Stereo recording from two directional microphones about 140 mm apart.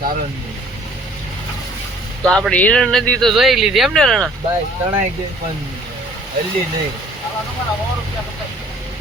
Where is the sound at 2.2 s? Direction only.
5° left (ahead or behind).